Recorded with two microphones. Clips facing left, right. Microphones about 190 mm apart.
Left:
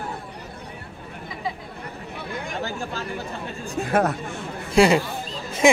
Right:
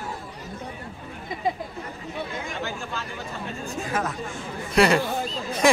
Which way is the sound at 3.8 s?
60° left (ahead or behind).